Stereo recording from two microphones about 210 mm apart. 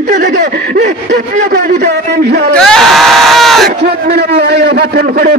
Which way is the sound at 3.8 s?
50° right (ahead or behind).